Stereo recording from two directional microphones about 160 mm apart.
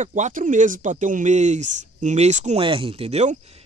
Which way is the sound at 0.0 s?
50° right (ahead or behind).